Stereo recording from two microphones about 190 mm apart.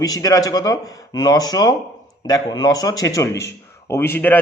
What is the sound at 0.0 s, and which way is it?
A man's voice, 20° left (ahead or behind).